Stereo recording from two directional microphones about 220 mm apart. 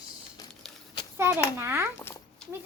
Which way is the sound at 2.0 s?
10° left (ahead or behind).